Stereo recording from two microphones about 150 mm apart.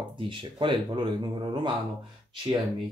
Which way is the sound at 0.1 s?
35° right (ahead or behind).